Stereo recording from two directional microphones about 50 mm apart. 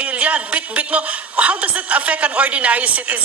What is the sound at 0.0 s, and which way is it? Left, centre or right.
A woman's voice, right.